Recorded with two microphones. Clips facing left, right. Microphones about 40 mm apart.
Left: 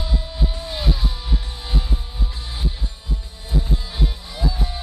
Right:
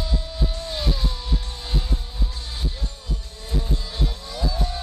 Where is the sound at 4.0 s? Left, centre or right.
Centre.